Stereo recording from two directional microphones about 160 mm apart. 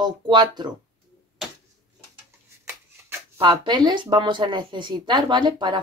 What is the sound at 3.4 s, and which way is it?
Speech, 25° right (ahead or behind).